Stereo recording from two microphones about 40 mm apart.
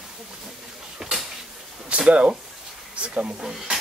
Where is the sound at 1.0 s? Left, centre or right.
Centre.